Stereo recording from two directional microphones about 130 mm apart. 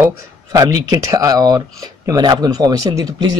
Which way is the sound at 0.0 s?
25° right (ahead or behind).